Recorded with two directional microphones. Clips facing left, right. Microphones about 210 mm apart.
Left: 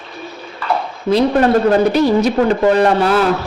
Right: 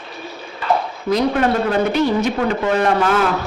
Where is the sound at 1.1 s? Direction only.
35° left (ahead or behind).